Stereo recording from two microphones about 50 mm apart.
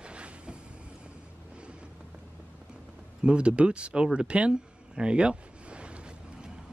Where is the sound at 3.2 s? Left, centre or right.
Right.